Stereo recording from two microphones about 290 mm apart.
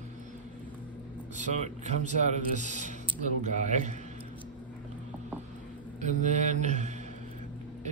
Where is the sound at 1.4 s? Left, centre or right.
Right.